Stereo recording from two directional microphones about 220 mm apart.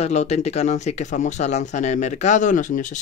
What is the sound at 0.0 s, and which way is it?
Speech, 30° left (ahead or behind).